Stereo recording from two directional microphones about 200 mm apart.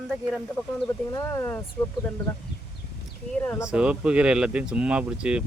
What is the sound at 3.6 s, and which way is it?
Speech, 5° right (ahead or behind).